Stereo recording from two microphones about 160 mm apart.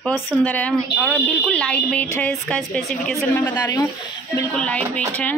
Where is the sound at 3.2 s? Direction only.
10° left (ahead or behind).